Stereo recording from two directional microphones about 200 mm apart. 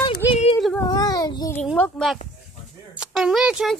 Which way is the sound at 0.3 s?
25° left (ahead or behind).